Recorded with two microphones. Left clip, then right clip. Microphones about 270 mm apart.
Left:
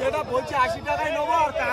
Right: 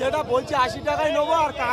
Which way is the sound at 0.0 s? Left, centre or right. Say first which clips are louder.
Right 2 dB; centre.